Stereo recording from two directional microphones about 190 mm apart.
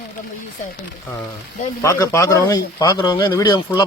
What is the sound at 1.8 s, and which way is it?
Speech, 15° left (ahead or behind).